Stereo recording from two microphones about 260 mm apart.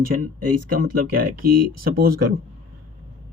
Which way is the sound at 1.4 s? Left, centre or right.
Right.